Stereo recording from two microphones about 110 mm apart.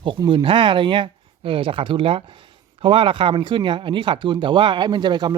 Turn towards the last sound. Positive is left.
turn(degrees=-40)  # may be behind; listen again after turning